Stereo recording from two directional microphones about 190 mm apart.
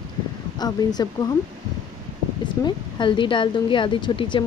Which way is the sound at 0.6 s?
20° left (ahead or behind).